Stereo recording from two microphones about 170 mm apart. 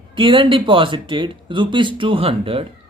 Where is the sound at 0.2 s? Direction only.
30° right (ahead or behind).